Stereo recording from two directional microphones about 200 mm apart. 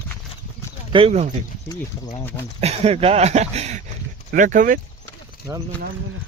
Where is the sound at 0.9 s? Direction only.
30° right (ahead or behind).